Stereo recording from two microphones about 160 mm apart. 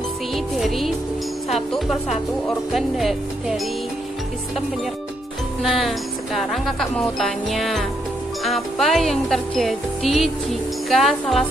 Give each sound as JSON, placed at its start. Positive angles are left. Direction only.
{"t": 0.6, "sound": "speech", "side_deg": 0}
{"t": 5.6, "sound": "speech", "side_deg": 0}